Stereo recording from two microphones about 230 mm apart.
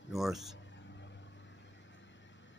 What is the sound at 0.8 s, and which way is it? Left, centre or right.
Vehicle, left.